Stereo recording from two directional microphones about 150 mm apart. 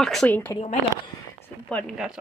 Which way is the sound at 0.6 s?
40° left (ahead or behind).